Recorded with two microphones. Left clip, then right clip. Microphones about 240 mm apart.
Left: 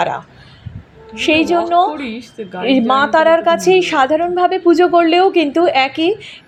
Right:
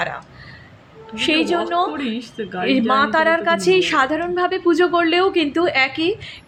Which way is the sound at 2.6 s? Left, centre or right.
Centre.